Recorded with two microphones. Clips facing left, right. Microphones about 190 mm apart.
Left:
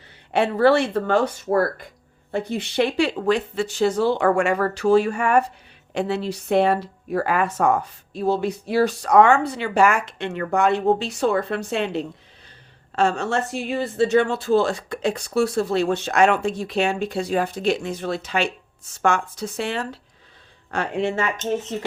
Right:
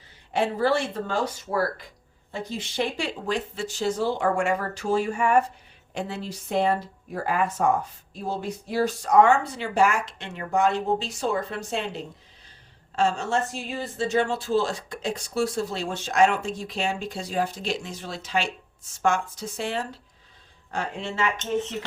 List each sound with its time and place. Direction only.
0.3 s speech: 65° left (ahead or behind)